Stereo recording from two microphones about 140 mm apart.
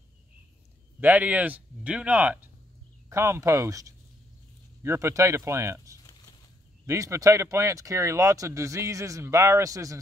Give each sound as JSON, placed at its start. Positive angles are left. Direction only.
{"t": 1.0, "sound": "speech", "side_deg": -10}